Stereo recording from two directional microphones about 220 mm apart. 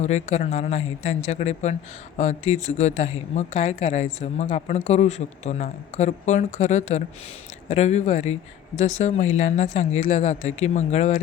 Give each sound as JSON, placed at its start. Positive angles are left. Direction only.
{"t": 0.0, "sound": "speech", "side_deg": 30}